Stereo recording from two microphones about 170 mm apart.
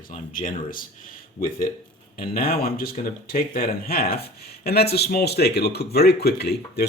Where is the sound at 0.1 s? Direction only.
50° left (ahead or behind).